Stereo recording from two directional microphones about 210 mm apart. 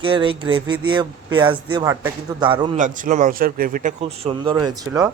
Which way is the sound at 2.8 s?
40° right (ahead or behind).